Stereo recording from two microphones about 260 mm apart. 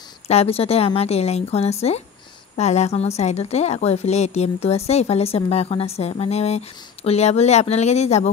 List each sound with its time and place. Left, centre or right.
0.3 s a woman's voice: left